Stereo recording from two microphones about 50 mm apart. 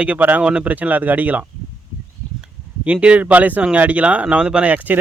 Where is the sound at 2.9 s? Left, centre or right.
Right.